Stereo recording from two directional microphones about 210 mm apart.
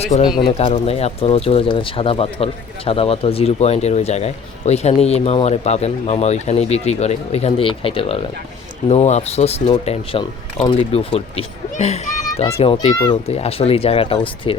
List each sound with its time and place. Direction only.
0.3 s speech: 25° left (ahead or behind)